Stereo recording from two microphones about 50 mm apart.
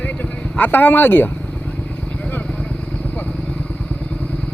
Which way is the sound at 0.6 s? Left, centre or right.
Left.